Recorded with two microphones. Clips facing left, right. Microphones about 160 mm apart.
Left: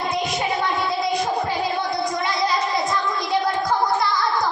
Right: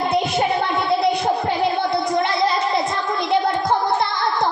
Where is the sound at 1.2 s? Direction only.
30° right (ahead or behind).